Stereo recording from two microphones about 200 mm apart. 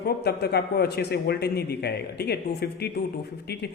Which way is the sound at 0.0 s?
55° left (ahead or behind).